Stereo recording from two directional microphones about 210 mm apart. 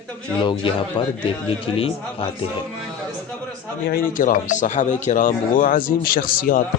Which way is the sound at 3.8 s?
45° left (ahead or behind).